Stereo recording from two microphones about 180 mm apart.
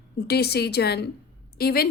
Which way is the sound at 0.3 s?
65° left (ahead or behind).